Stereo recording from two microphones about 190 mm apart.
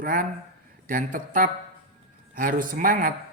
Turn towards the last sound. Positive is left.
turn(degrees=-50)  # may be behind; listen again after turning